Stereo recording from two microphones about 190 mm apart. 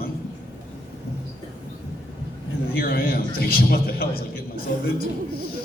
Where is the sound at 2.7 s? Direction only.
50° left (ahead or behind).